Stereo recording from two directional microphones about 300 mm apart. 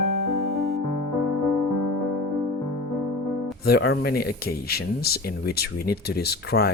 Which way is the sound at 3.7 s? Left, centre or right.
Left.